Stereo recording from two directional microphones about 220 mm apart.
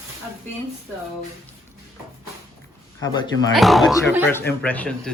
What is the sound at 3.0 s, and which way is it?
Speech, 20° left (ahead or behind).